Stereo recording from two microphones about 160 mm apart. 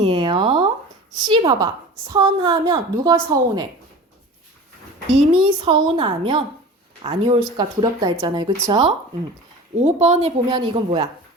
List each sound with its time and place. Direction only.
0.0 s a sound: 30° right (ahead or behind)
1.3 s a woman's voice: 30° right (ahead or behind)
5.1 s a woman's voice: 30° right (ahead or behind)
9.7 s speech: 45° right (ahead or behind)
10.5 s a woman's voice: 30° right (ahead or behind)